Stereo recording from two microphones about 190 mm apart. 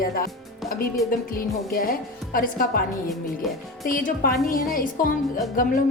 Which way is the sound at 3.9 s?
45° left (ahead or behind).